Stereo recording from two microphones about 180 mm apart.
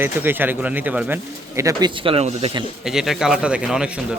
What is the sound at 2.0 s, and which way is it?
Speech, 30° right (ahead or behind).